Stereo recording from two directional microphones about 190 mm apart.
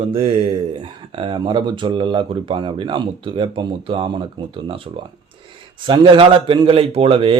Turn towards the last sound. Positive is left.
turn(degrees=-30)  # may be behind; listen again after turning